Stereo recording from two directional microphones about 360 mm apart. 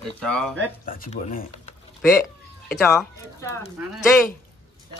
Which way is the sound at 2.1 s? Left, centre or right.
Centre.